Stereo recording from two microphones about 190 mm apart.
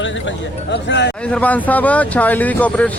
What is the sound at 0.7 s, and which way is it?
Speech, 70° left (ahead or behind).